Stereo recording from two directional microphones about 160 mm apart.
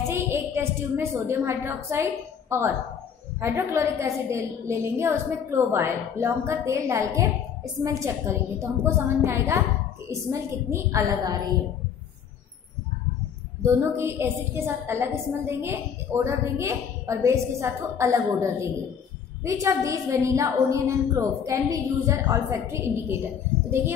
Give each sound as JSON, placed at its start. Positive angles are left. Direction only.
{"t": 0.1, "sound": "a woman's voice", "side_deg": -15}
{"t": 13.7, "sound": "a woman's voice", "side_deg": -15}